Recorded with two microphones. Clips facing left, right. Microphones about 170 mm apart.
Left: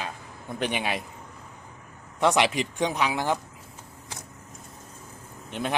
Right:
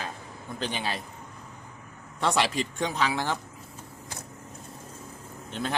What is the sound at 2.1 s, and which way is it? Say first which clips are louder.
Speech: left 4 dB; 15° left (ahead or behind).